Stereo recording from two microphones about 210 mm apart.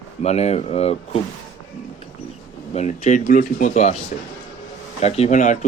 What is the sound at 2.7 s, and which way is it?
Speech, 35° left (ahead or behind).